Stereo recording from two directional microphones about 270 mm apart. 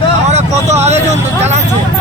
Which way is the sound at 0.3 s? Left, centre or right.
Right.